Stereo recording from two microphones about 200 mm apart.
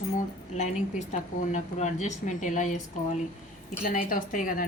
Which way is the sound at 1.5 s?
35° left (ahead or behind).